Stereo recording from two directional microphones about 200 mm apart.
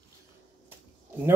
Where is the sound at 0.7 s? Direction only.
10° right (ahead or behind).